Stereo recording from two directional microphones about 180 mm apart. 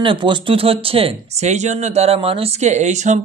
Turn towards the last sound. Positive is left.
turn(degrees=-40)  # may be behind; listen again after turning